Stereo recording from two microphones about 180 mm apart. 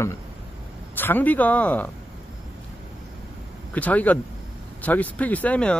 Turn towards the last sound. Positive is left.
turn(degrees=5)  # may be behind; listen again after turning